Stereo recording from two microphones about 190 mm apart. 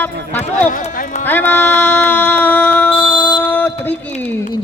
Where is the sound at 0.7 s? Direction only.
45° left (ahead or behind).